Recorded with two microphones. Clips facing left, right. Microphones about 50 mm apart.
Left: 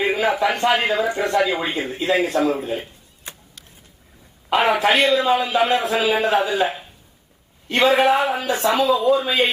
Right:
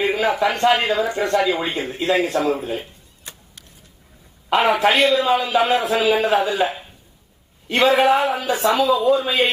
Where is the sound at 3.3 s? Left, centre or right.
Left.